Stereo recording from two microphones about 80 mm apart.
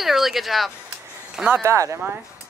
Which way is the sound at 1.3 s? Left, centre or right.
Centre.